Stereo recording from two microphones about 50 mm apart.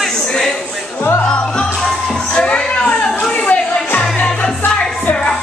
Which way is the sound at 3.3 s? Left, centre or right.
Left.